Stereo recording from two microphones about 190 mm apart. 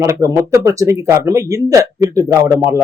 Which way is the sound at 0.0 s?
15° right (ahead or behind).